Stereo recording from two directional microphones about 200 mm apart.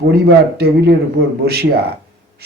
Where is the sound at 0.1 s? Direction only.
50° right (ahead or behind).